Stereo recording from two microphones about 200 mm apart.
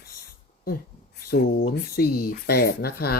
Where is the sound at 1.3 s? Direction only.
50° left (ahead or behind).